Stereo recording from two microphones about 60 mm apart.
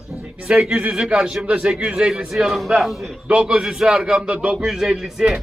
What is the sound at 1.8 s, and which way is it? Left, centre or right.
Speech, right.